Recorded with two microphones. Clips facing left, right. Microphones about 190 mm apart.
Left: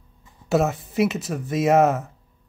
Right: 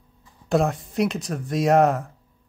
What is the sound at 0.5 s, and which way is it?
Speech, 5° left (ahead or behind).